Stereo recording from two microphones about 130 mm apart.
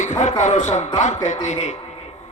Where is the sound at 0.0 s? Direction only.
70° left (ahead or behind).